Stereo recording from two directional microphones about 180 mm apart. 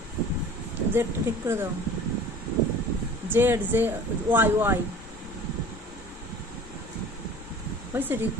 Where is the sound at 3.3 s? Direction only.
10° right (ahead or behind).